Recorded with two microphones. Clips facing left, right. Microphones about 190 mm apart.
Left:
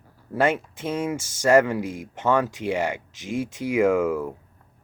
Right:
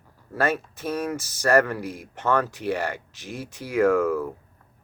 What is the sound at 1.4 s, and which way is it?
Speech, 20° left (ahead or behind).